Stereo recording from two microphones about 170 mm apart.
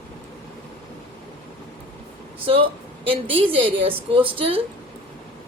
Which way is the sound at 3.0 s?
30° right (ahead or behind).